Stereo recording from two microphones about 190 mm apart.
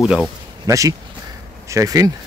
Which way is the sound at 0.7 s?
15° right (ahead or behind).